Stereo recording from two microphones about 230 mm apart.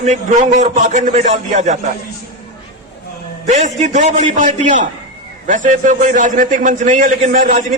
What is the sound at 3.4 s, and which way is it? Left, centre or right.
A man's voice, right.